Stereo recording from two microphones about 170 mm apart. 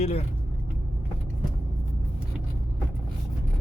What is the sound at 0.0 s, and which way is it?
Speech, 35° left (ahead or behind).